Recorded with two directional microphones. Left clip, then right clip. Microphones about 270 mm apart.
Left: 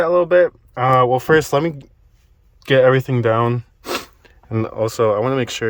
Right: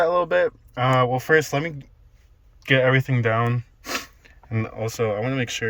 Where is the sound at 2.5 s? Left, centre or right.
Left.